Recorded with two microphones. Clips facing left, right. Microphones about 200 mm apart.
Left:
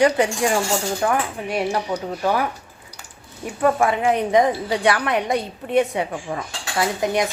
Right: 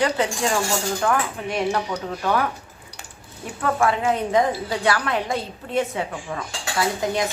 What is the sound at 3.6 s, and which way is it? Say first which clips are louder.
A woman's voice: left 3 dB; 20° left (ahead or behind).